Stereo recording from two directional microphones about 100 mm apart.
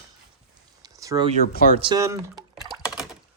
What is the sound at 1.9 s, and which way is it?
Speech, 35° right (ahead or behind).